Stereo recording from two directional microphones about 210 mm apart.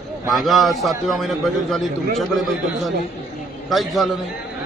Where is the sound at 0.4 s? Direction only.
Centre (ahead or behind).